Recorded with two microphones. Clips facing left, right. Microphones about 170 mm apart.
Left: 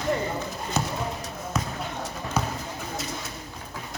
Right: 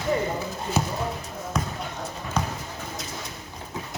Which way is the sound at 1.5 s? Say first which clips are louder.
Even; centre (ahead or behind).